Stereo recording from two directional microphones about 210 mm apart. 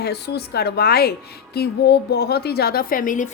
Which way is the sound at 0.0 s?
50° left (ahead or behind).